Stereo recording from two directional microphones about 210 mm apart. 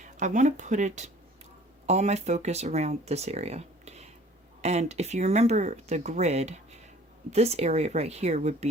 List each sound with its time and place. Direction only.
0.0 s speech: 35° right (ahead or behind)